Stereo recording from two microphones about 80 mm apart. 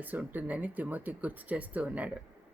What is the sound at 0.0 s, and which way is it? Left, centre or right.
Speech, right.